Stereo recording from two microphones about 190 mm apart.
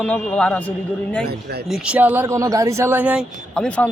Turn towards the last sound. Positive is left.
turn(degrees=5)  # may be behind; listen again after turning